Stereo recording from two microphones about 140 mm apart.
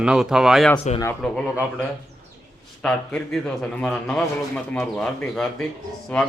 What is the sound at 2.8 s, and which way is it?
A man's voice, 5° left (ahead or behind).